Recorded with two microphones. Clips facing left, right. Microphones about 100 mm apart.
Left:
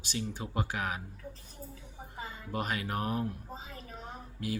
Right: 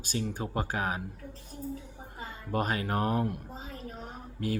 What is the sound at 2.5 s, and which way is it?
Speech, 40° right (ahead or behind).